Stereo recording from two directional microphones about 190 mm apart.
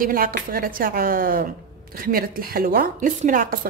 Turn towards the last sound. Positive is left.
turn(degrees=-45)  # may be behind; listen again after turning